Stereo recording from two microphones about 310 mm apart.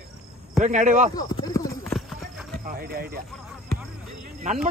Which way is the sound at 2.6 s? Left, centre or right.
Right.